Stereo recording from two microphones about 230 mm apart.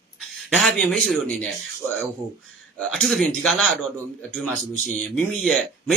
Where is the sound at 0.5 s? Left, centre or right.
Centre.